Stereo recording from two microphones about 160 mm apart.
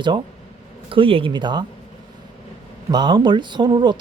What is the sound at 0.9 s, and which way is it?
Speech, 35° right (ahead or behind).